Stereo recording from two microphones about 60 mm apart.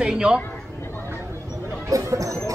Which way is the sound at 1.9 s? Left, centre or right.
Right.